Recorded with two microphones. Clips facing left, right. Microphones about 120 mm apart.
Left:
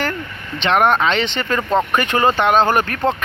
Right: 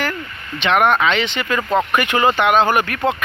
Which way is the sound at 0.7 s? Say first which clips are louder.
Even; 35° left (ahead or behind).